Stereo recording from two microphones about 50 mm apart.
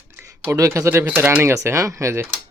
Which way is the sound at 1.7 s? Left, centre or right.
Right.